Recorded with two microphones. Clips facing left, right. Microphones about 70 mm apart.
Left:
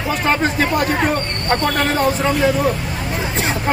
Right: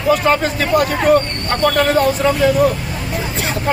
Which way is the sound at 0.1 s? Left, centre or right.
Left.